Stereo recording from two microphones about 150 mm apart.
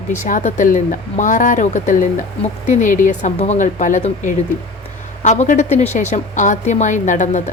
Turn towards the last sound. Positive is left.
turn(degrees=55)  # may be behind; listen again after turning